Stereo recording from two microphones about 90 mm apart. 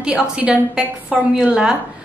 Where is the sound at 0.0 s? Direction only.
10° right (ahead or behind).